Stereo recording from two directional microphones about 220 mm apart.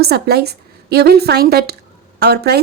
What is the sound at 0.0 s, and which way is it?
A woman's voice, 45° right (ahead or behind).